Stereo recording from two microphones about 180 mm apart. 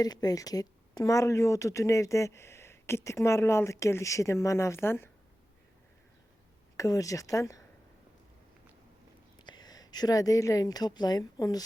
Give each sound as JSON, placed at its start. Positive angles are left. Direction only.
{"t": 0.0, "sound": "speech", "side_deg": 20}
{"t": 6.7, "sound": "speech", "side_deg": 20}
{"t": 9.4, "sound": "speech", "side_deg": 25}